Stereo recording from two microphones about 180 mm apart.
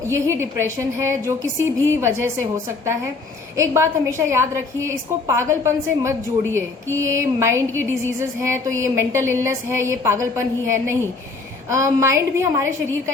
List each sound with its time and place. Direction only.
0.0 s a woman's voice: 15° right (ahead or behind)
3.6 s a woman's voice: 15° right (ahead or behind)